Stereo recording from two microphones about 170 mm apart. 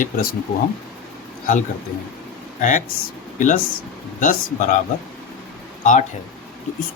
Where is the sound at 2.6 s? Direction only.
50° left (ahead or behind).